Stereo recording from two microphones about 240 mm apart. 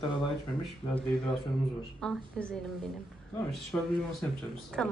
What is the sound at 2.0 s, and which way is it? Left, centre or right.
Speech, centre.